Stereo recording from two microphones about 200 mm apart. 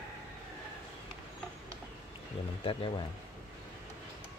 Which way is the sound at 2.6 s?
25° left (ahead or behind).